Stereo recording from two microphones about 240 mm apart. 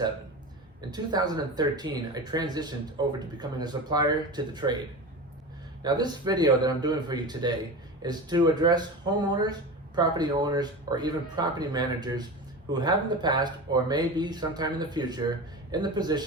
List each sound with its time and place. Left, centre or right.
0.9 s speech: centre
5.8 s speech: centre